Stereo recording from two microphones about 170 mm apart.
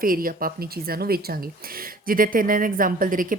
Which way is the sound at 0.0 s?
55° right (ahead or behind).